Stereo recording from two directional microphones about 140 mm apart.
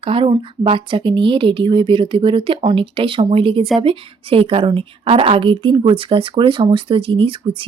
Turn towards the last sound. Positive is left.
turn(degrees=-40)  # may be behind; listen again after turning